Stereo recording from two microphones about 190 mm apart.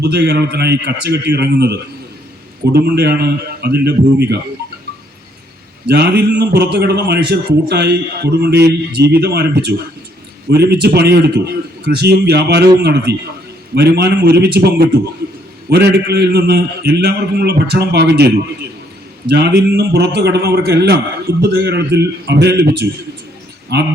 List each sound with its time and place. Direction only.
0.0 s a man's voice: 60° right (ahead or behind)
5.9 s a man's voice: 60° right (ahead or behind)